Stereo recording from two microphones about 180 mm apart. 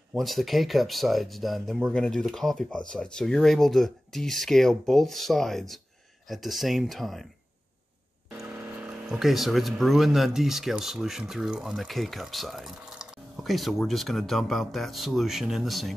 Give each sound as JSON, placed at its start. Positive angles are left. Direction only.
{"t": 0.1, "sound": "speech", "side_deg": 0}
{"t": 8.4, "sound": "speech", "side_deg": -5}